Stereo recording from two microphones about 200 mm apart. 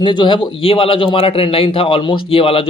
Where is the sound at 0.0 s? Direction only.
25° left (ahead or behind).